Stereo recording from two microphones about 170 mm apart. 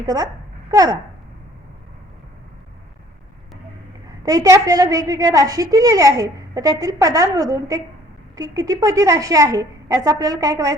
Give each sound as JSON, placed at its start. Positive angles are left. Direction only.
{"t": 0.0, "sound": "a woman's voice", "side_deg": -20}
{"t": 4.2, "sound": "a woman's voice", "side_deg": -20}